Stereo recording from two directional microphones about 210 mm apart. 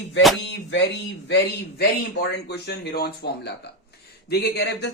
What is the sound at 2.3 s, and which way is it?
Speech, 50° left (ahead or behind).